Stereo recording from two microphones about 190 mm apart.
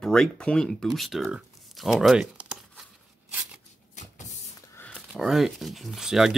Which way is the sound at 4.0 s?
40° left (ahead or behind).